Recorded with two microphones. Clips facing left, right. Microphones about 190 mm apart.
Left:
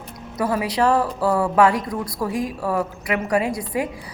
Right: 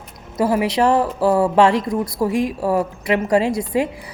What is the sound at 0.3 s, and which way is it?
Speech, 25° right (ahead or behind).